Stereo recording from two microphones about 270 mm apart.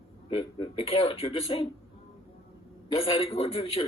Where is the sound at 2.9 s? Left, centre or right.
Left.